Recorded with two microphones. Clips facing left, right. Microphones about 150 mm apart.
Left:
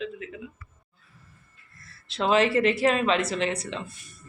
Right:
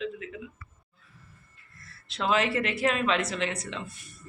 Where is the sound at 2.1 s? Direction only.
30° left (ahead or behind).